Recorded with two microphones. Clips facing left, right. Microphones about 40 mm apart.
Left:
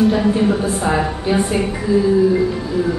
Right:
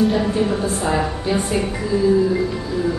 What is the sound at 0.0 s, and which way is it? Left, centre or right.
A woman's voice, centre.